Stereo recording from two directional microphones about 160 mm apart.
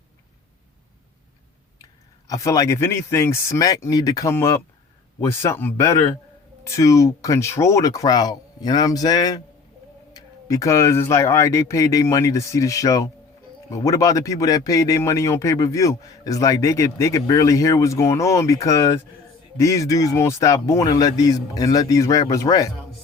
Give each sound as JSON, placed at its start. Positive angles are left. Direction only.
{"t": 2.2, "sound": "a man's voice", "side_deg": 20}